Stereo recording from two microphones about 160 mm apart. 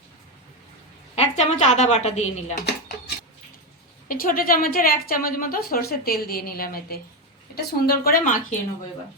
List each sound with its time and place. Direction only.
1.1 s a woman's voice: 40° left (ahead or behind)
4.1 s a woman's voice: 60° left (ahead or behind)